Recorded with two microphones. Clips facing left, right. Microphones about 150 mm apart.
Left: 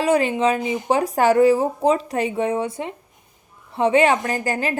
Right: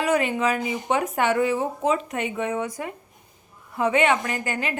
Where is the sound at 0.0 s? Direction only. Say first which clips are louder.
Left 4 dB; 30° left (ahead or behind).